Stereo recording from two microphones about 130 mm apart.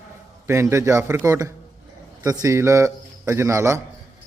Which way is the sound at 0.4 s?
20° right (ahead or behind).